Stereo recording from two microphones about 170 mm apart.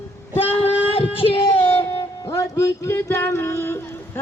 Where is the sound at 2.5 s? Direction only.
15° left (ahead or behind).